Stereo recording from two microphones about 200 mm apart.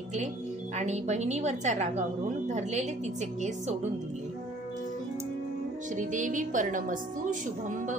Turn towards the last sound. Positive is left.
turn(degrees=-40)  # may be behind; listen again after turning